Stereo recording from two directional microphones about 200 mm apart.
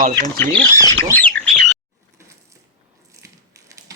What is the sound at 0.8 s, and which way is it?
Speech, 15° left (ahead or behind).